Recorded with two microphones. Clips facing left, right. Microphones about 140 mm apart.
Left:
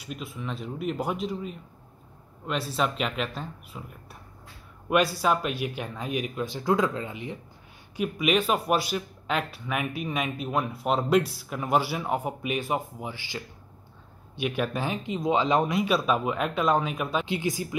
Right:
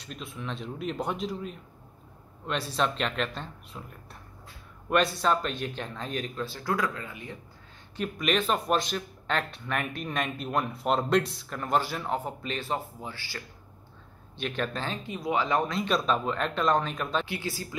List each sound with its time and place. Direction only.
0.0 s speech: 5° left (ahead or behind); by 7.3 s 20° left (ahead or behind)
7.9 s speech: 5° left (ahead or behind)